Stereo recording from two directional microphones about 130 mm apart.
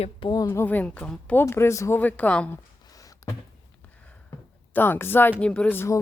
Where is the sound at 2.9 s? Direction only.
25° left (ahead or behind).